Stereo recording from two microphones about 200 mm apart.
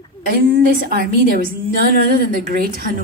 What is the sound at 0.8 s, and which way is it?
A woman's voice, 45° right (ahead or behind).